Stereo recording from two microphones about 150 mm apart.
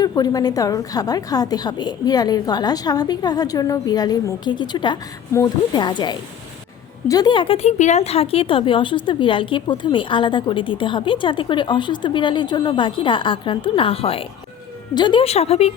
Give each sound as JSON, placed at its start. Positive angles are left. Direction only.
{"t": 0.0, "sound": "a woman's voice", "side_deg": 25}